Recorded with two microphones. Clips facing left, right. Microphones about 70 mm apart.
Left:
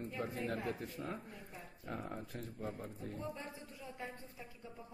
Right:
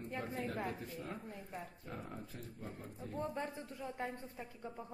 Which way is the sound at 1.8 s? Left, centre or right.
Left.